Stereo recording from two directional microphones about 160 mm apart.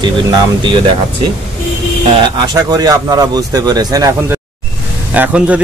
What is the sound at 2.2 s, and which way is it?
Speech, 25° right (ahead or behind).